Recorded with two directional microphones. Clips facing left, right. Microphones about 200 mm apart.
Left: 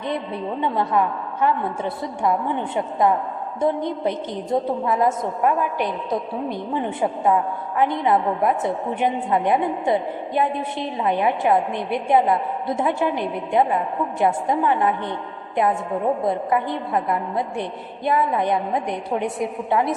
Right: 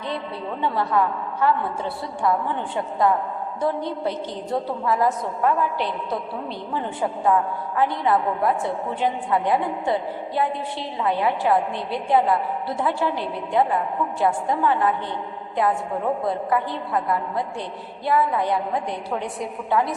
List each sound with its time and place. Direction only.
0.6 s a woman's voice: 20° left (ahead or behind)
16.2 s a woman's voice: 20° left (ahead or behind)